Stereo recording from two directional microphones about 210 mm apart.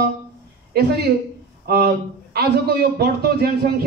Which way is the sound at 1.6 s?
50° right (ahead or behind).